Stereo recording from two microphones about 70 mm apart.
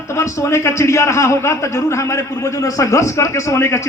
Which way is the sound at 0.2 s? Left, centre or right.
Left.